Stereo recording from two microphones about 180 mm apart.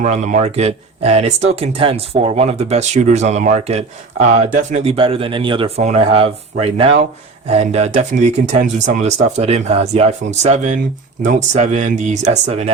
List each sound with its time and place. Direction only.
0.0 s speech: 40° right (ahead or behind)